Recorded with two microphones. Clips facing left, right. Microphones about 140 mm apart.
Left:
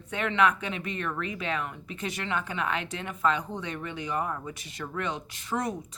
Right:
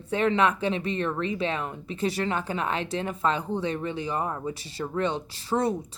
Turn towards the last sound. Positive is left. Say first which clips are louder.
# right 5 dB
turn(degrees=-30)  # may be behind; listen again after turning